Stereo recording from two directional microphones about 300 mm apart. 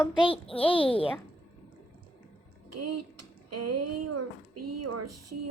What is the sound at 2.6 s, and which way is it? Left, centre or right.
Speech, right.